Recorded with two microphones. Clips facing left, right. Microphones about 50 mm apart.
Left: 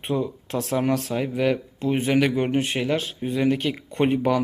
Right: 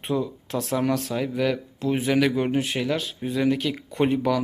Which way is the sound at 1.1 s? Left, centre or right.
Left.